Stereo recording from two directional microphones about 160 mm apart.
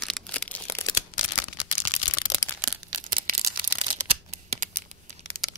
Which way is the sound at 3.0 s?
60° right (ahead or behind).